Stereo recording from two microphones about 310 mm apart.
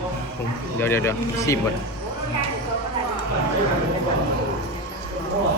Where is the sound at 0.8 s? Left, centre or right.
Centre.